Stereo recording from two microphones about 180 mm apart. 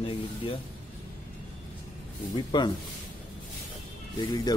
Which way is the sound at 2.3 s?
25° left (ahead or behind).